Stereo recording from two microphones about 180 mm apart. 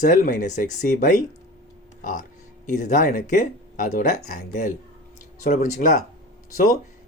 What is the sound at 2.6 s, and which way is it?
Speech, 45° left (ahead or behind).